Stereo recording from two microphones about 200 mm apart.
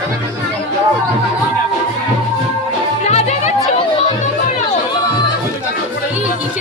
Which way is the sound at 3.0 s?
35° left (ahead or behind).